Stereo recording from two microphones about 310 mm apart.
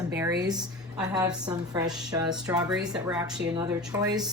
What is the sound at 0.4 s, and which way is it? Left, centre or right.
A woman's voice, centre.